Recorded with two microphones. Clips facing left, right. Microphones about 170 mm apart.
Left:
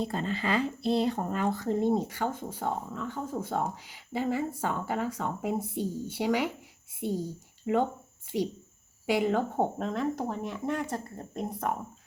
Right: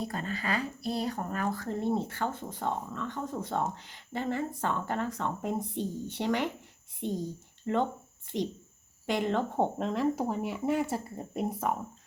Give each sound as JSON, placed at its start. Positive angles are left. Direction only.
{"t": 0.0, "sound": "a woman's voice", "side_deg": 25}